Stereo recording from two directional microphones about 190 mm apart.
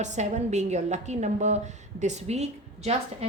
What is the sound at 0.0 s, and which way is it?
A woman's voice, 40° right (ahead or behind).